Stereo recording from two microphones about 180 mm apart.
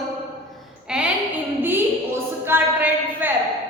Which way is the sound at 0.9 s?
5° right (ahead or behind).